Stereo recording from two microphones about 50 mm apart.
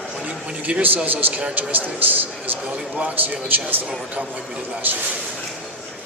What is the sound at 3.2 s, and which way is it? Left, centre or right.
Speech, right.